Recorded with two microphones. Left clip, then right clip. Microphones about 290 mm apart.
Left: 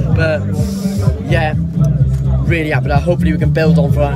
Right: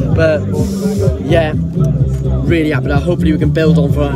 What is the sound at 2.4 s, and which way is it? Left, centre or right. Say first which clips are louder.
Speech: right 2 dB; centre.